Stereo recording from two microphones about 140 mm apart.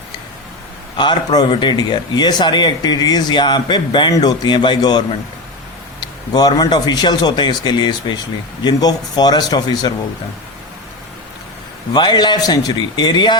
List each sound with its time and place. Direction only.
0.9 s a man's voice: 30° left (ahead or behind)
11.9 s speech: 35° left (ahead or behind)